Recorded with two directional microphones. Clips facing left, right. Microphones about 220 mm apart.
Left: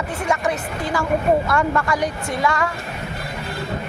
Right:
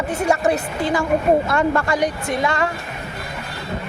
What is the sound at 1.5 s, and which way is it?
A woman's voice, 25° right (ahead or behind).